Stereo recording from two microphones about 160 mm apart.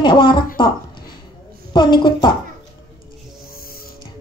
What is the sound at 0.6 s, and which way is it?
A woman's voice, 30° left (ahead or behind).